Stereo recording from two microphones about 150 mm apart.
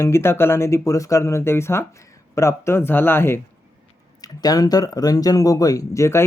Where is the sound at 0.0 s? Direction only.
15° left (ahead or behind).